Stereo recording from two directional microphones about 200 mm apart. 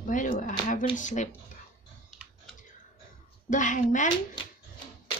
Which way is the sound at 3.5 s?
40° left (ahead or behind).